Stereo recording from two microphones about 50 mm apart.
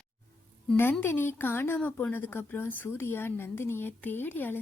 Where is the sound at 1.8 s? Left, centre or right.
Left.